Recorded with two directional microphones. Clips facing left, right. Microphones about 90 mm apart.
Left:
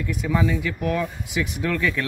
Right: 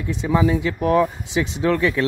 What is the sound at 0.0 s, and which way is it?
Speech, 25° right (ahead or behind).